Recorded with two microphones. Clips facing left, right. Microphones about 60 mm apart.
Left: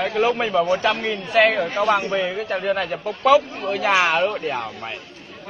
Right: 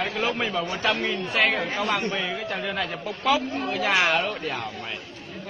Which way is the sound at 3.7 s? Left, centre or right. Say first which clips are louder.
Left 4 dB; centre.